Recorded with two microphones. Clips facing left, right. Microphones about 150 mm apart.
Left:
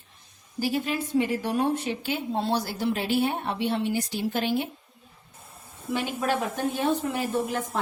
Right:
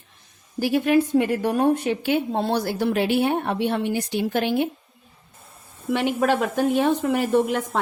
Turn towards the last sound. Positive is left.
turn(degrees=-70)  # may be behind; listen again after turning